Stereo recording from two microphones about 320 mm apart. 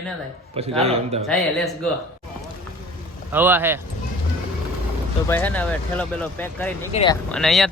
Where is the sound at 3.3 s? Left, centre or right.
Centre.